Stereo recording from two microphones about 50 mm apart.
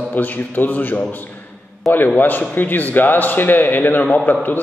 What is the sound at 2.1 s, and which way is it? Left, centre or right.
A man's voice, left.